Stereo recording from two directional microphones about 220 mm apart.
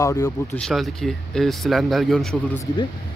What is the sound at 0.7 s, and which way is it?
Speech, centre (ahead or behind).